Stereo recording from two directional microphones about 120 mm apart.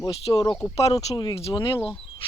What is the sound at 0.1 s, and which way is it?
Speech, 55° left (ahead or behind).